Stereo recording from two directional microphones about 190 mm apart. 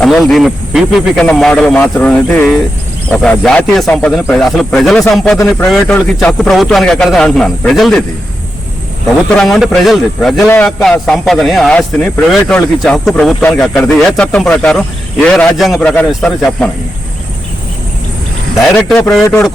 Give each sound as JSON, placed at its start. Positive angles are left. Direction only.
{"t": 0.0, "sound": "a man's voice", "side_deg": 0}
{"t": 9.4, "sound": "a man's voice", "side_deg": 0}
{"t": 18.5, "sound": "a man's voice", "side_deg": 0}